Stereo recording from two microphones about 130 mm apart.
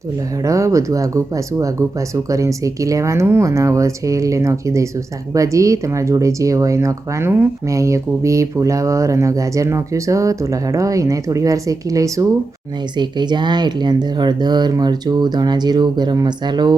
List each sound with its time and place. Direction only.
0.4 s speech: 25° right (ahead or behind)
13.0 s speech: 35° right (ahead or behind)